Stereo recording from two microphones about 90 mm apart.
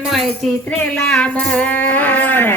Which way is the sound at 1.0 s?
10° left (ahead or behind).